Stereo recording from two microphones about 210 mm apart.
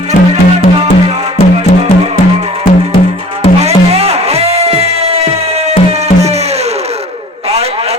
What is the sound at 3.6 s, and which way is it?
Music, 30° right (ahead or behind).